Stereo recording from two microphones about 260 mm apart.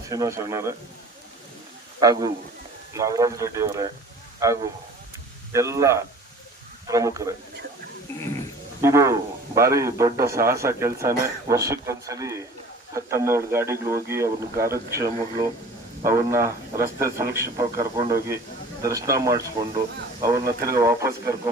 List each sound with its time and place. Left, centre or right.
0.1 s speech: centre
2.0 s speech: centre
5.5 s speech: centre
8.8 s speech: centre